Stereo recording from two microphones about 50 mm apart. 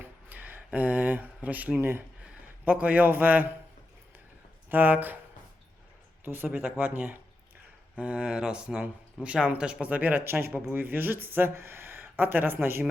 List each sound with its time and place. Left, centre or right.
0.3 s a sound: right
1.8 s speech: right
2.7 s speech: right
4.7 s speech: right
6.2 s speech: right